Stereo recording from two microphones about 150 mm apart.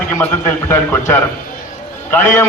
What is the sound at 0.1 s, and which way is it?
A man's voice, 10° left (ahead or behind).